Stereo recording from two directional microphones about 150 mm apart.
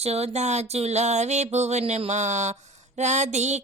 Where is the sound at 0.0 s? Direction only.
45° right (ahead or behind).